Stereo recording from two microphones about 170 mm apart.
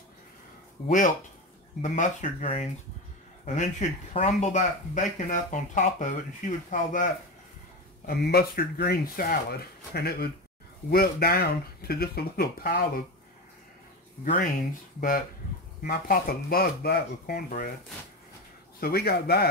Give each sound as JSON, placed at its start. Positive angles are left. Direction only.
{"t": 0.8, "sound": "speech", "side_deg": 50}
{"t": 2.4, "sound": "speech", "side_deg": 35}
{"t": 4.1, "sound": "speech", "side_deg": 40}
{"t": 8.1, "sound": "speech", "side_deg": 65}
{"t": 14.2, "sound": "speech", "side_deg": 55}
{"t": 18.8, "sound": "speech", "side_deg": 65}